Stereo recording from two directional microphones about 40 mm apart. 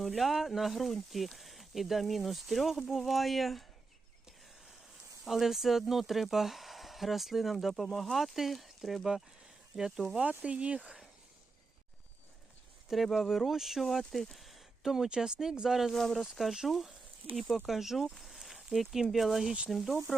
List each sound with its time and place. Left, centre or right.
0.0 s speech: centre
5.2 s speech: centre
9.7 s speech: centre
10.2 s speech: right
12.9 s speech: centre
14.3 s a sound: centre
15.1 s speech: centre
16.0 s speech: centre
16.2 s speech: centre